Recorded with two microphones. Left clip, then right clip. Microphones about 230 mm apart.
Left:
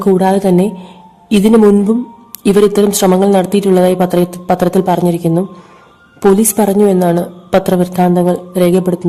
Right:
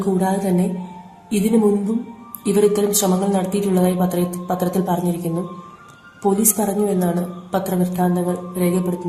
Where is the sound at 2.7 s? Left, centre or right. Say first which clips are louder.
Left 8 dB; left.